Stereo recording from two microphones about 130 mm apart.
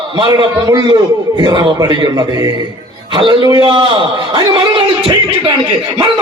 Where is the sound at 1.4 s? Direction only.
30° right (ahead or behind).